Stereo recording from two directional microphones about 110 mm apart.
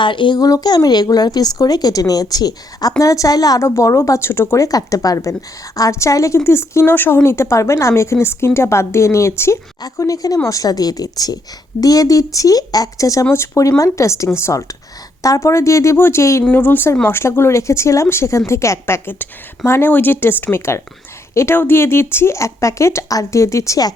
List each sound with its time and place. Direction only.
0.0 s speech: 45° left (ahead or behind); by 16.4 s 25° left (ahead or behind)
16.4 s speech: 15° left (ahead or behind); by 23.9 s 30° left (ahead or behind)